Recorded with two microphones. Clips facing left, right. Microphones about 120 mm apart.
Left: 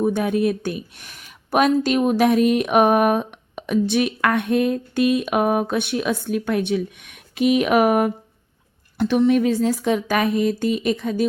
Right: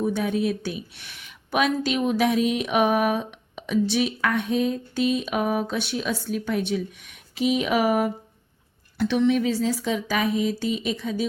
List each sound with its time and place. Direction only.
0.0 s speech: 55° left (ahead or behind)
9.0 s speech: 45° left (ahead or behind)